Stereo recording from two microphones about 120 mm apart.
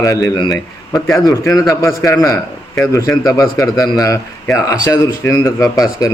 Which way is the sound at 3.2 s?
30° left (ahead or behind).